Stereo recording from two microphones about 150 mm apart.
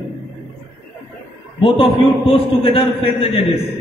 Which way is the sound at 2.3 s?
40° left (ahead or behind).